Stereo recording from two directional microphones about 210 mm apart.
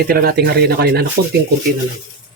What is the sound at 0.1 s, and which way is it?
Speech, 45° right (ahead or behind).